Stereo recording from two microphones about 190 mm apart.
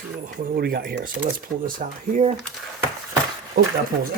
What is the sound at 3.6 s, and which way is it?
Speech, 55° right (ahead or behind).